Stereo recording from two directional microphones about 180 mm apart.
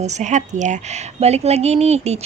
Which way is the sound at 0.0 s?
40° right (ahead or behind).